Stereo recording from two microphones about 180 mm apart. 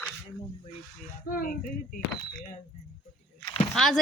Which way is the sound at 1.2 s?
50° left (ahead or behind).